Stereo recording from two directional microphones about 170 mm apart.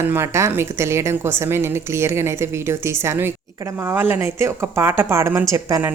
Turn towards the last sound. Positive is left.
turn(degrees=-20)  # may be behind; listen again after turning